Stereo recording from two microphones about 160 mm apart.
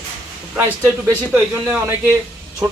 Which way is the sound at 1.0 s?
15° right (ahead or behind).